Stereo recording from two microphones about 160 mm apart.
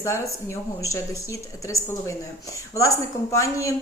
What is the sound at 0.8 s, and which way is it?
A woman's voice, 20° left (ahead or behind).